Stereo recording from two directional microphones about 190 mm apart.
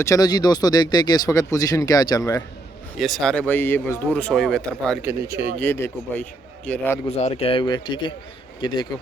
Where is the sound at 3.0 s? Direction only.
Centre (ahead or behind).